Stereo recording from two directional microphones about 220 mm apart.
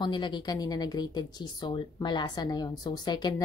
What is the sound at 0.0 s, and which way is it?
A woman's voice, 20° left (ahead or behind).